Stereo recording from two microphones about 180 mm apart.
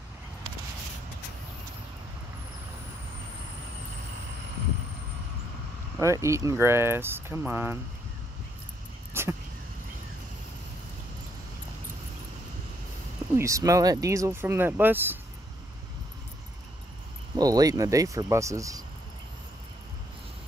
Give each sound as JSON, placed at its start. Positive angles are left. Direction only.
{"t": 5.9, "sound": "speech", "side_deg": -15}
{"t": 9.1, "sound": "a sound", "side_deg": -15}
{"t": 13.4, "sound": "speech", "side_deg": -15}
{"t": 17.4, "sound": "speech", "side_deg": -20}